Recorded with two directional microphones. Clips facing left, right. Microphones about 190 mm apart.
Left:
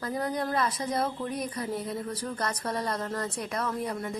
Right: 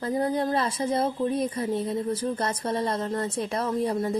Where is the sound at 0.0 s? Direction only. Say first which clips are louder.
Right 5 dB; 30° right (ahead or behind).